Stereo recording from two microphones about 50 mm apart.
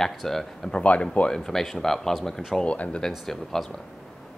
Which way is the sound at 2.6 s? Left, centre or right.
Left.